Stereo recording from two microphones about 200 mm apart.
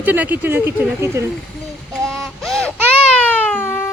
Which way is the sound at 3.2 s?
5° left (ahead or behind).